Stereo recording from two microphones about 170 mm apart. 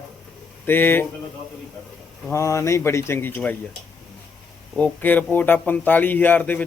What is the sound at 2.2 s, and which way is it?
Speech, 15° left (ahead or behind).